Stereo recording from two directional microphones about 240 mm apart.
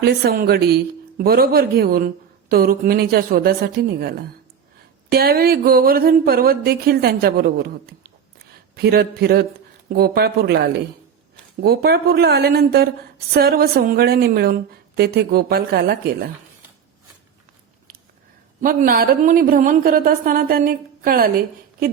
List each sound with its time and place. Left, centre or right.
0.0 s speech: right
5.1 s speech: right
18.6 s speech: right